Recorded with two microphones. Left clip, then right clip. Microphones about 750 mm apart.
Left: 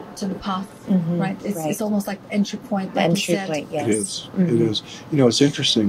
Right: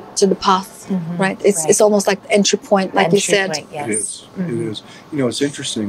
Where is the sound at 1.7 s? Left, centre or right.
Right.